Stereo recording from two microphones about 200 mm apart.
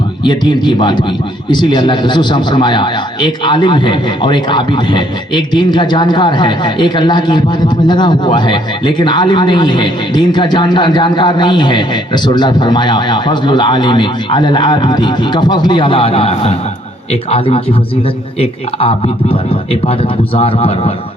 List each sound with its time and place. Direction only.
0.3 s a man's voice: 25° left (ahead or behind)